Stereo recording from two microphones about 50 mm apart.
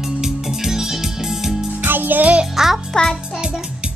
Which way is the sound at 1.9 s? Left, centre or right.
Right.